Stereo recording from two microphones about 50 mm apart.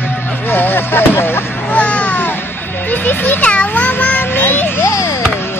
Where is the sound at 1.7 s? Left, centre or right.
Left.